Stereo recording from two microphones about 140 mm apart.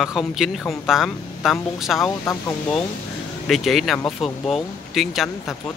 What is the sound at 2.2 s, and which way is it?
Speech, 15° left (ahead or behind).